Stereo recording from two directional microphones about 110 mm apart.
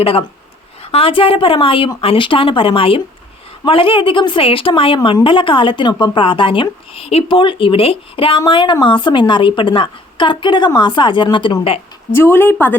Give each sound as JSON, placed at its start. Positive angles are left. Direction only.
{"t": 0.0, "sound": "a woman's voice", "side_deg": 60}
{"t": 12.1, "sound": "a woman's voice", "side_deg": 20}